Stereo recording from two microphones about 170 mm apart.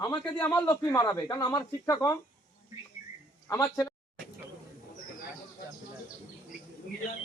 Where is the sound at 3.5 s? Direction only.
20° left (ahead or behind).